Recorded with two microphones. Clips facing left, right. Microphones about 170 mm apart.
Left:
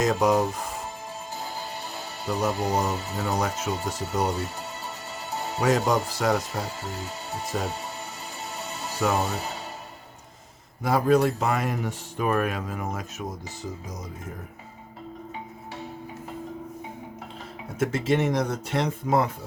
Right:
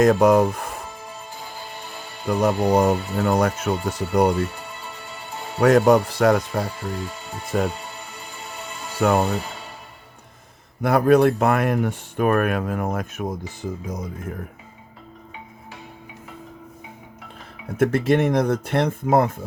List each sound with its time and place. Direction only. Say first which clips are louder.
0.0 s speech: right 7 dB; 55° right (ahead or behind)
2.2 s speech: right 6 dB; 55° right (ahead or behind)
5.5 s speech: right 8 dB; 55° right (ahead or behind)
9.0 s speech: right 6 dB; 55° right (ahead or behind)
10.8 s speech: right 5 dB; 60° right (ahead or behind)
17.7 s speech: right 5 dB; 60° right (ahead or behind)